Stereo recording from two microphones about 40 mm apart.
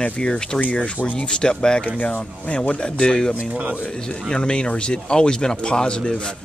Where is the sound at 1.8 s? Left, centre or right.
Left.